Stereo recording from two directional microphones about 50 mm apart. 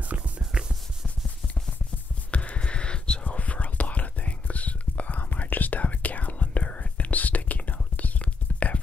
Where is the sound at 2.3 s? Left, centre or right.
Left.